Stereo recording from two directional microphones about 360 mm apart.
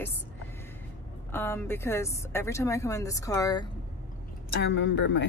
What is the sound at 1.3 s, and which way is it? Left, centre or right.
Speech, centre.